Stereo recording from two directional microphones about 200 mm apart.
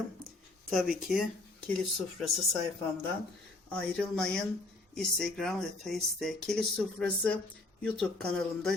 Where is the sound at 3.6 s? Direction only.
5° left (ahead or behind).